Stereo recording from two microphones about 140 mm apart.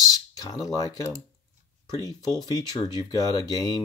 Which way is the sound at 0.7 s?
25° left (ahead or behind).